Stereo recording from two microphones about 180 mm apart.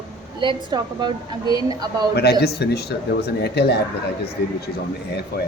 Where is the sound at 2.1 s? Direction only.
65° left (ahead or behind).